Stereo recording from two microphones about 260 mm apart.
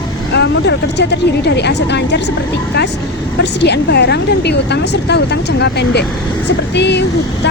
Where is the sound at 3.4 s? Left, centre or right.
Left.